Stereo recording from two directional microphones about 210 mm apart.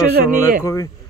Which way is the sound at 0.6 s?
15° left (ahead or behind).